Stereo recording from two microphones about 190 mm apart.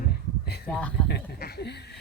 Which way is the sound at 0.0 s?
55° left (ahead or behind).